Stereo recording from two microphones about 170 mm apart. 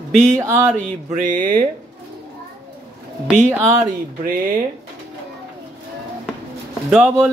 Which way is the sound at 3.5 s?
15° right (ahead or behind).